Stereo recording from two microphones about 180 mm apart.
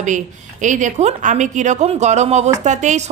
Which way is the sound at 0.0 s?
45° right (ahead or behind).